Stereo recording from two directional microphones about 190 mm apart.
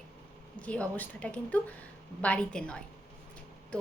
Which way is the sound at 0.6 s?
5° left (ahead or behind).